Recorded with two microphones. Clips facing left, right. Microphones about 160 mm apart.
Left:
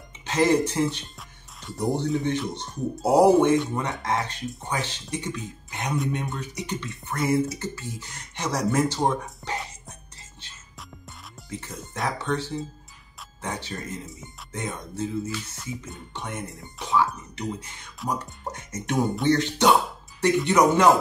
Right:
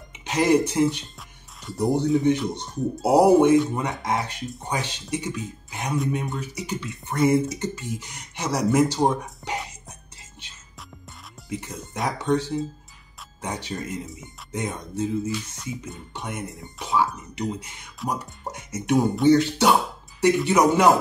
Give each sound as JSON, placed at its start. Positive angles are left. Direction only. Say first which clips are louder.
{"t": 0.2, "sound": "speech", "louder": "right 1 dB", "side_deg": -15}
{"t": 1.6, "sound": "speech", "louder": "right 3 dB", "side_deg": 0}
{"t": 2.5, "sound": "speech", "louder": "right 3 dB", "side_deg": -10}
{"t": 7.2, "sound": "speech", "louder": "right 3 dB", "side_deg": -20}
{"t": 11.9, "sound": "speech", "louder": "right 4 dB", "side_deg": -15}
{"t": 16.1, "sound": "speech", "louder": "right 1 dB", "side_deg": -10}
{"t": 16.4, "sound": "speech", "louder": "right 2 dB", "side_deg": 0}
{"t": 16.8, "sound": "speech", "louder": "even", "side_deg": -15}